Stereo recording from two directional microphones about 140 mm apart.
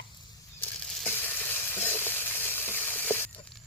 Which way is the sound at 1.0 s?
15° left (ahead or behind).